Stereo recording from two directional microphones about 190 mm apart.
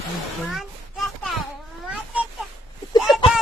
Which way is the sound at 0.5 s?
Centre (ahead or behind).